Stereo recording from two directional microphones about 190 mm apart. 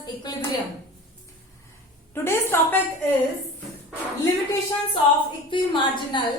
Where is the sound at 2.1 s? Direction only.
15° left (ahead or behind).